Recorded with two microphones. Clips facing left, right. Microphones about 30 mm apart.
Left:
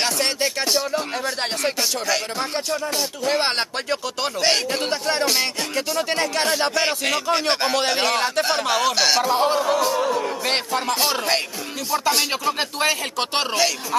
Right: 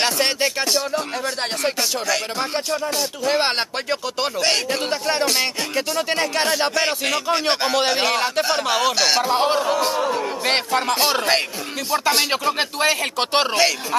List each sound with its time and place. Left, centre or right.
0.0 s speech: centre
0.9 s music: centre
2.3 s speech: centre
4.4 s music: centre
8.6 s speech: centre
9.3 s speech: right